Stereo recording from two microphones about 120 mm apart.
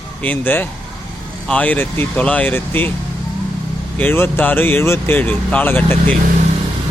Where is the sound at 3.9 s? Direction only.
15° left (ahead or behind).